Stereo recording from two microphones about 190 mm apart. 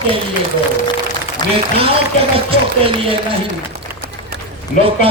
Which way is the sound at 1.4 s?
20° left (ahead or behind).